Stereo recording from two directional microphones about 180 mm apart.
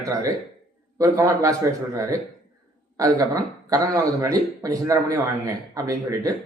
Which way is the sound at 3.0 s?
20° right (ahead or behind).